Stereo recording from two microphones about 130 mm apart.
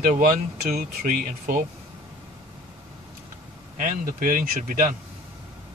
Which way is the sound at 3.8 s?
85° right.